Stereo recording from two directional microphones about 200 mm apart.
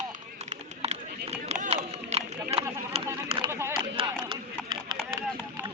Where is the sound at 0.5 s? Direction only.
30° right (ahead or behind).